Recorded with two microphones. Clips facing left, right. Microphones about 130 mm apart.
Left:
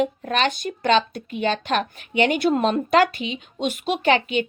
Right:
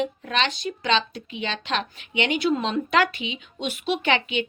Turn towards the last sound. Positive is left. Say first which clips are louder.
# left 4 dB
turn(degrees=40)  # may be behind; listen again after turning